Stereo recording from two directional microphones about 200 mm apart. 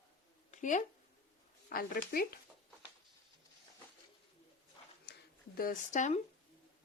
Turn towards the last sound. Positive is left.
turn(degrees=35)  # may be behind; listen again after turning